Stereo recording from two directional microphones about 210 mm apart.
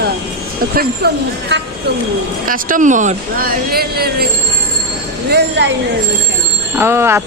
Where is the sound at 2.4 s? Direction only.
40° right (ahead or behind).